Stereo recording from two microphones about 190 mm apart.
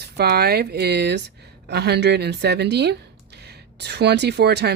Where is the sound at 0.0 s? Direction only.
60° right (ahead or behind).